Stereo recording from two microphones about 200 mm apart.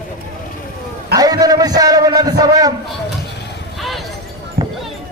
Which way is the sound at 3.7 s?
Centre (ahead or behind).